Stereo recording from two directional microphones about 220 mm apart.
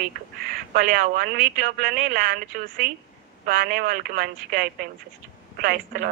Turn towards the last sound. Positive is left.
turn(degrees=-45)  # may be behind; listen again after turning